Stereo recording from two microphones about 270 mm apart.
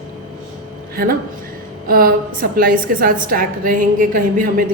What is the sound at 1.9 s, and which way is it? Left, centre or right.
A woman's voice, right.